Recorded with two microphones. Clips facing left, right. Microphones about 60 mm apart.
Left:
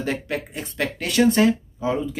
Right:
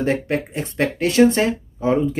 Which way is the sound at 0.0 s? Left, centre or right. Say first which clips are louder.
Right 6 dB; right.